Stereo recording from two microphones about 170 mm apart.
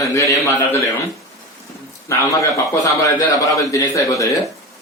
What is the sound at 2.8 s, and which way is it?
A man's voice, 20° left (ahead or behind).